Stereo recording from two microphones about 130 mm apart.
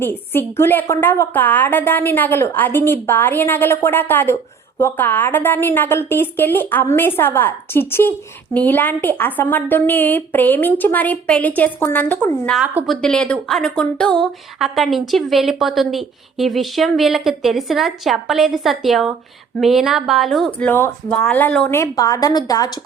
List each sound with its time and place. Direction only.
0.0 s a woman's voice: 15° left (ahead or behind); by 20.7 s centre (ahead or behind)
20.7 s a woman's voice: 15° left (ahead or behind)
21.7 s a woman's voice: 25° left (ahead or behind)